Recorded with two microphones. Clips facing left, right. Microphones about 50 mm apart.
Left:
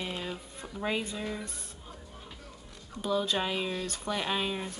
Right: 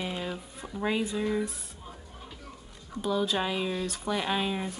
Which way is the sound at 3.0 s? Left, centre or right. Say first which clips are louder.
Right 1 dB; centre.